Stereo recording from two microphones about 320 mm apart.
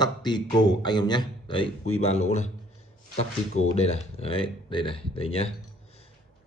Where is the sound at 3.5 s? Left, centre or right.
Centre.